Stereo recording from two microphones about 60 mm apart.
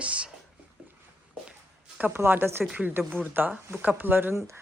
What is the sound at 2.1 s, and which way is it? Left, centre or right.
Speech, right.